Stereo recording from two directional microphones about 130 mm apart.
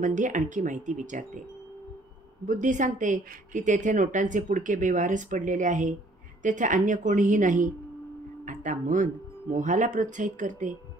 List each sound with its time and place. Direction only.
0.0 s speech: 75° right (ahead or behind)
2.4 s speech: 75° right (ahead or behind)